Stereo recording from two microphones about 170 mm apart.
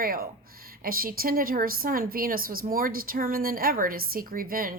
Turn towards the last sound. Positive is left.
turn(degrees=-55)  # may be behind; listen again after turning